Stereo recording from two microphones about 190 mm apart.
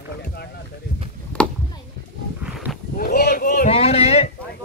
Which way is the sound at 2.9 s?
55° left (ahead or behind).